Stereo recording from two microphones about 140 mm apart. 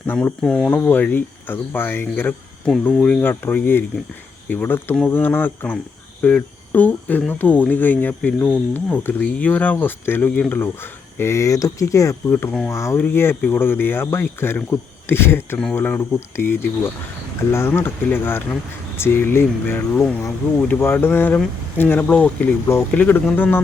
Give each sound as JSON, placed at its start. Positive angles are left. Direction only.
{"t": 0.0, "sound": "speech", "side_deg": 10}